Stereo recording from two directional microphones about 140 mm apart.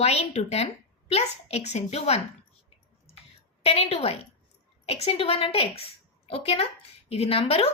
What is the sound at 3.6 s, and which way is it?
A woman's voice, 45° left (ahead or behind).